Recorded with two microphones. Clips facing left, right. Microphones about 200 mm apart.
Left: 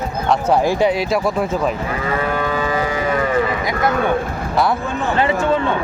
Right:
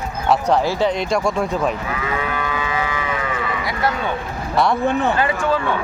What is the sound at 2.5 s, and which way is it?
Cattle, 35° left (ahead or behind).